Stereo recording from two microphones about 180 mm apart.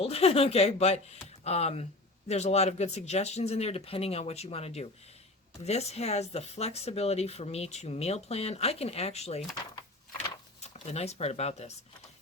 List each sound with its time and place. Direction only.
0.0 s speech: 35° left (ahead or behind)
10.6 s speech: 35° left (ahead or behind)